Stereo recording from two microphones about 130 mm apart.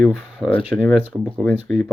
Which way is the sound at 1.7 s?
Centre (ahead or behind).